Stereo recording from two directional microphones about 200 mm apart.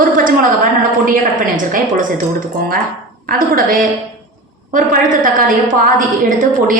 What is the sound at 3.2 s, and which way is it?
A woman's voice, 45° right (ahead or behind).